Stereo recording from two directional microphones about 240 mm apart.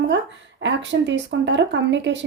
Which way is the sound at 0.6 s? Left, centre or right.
Right.